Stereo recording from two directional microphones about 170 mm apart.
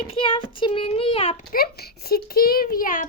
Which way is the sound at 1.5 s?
65° left (ahead or behind).